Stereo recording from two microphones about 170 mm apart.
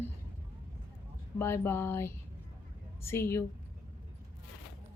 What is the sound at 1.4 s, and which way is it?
Speech, 15° left (ahead or behind).